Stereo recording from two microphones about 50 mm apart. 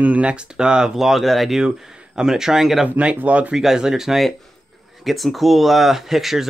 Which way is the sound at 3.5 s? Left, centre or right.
Centre.